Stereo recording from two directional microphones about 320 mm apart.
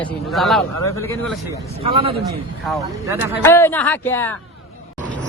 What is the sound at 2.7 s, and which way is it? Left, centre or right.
Speech, centre.